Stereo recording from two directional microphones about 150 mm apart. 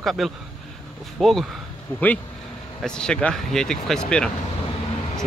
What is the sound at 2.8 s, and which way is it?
Speech, 5° left (ahead or behind).